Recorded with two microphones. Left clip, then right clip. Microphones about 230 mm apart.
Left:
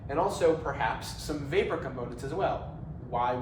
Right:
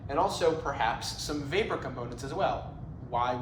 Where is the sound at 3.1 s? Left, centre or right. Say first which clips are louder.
Even; centre.